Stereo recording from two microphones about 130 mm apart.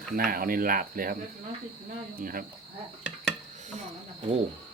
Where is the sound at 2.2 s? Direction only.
90° right.